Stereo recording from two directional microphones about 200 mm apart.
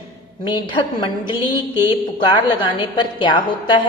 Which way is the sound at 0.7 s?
25° left (ahead or behind).